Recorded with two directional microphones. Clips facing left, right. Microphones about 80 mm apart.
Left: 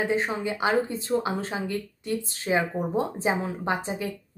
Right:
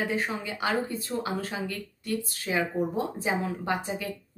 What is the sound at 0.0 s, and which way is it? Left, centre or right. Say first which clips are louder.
Speech: left 4 dB; left.